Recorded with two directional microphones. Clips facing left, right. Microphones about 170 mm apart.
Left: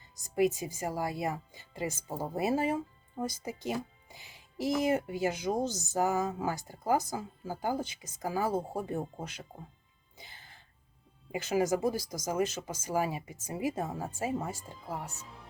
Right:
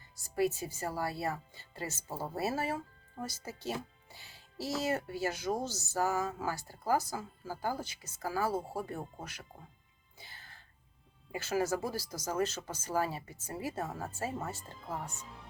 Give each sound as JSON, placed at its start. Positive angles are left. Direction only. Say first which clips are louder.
{"t": 0.2, "sound": "speech", "louder": "left 3 dB", "side_deg": 15}
{"t": 10.2, "sound": "music", "louder": "left 1 dB", "side_deg": 20}
{"t": 11.3, "sound": "speech", "louder": "left 4 dB", "side_deg": 15}